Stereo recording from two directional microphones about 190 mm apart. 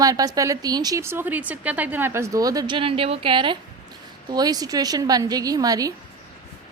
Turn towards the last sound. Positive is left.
turn(degrees=-20)  # may be behind; listen again after turning